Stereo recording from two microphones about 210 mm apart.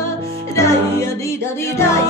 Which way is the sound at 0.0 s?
15° left (ahead or behind).